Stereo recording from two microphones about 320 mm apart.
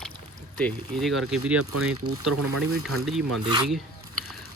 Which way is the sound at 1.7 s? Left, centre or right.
Right.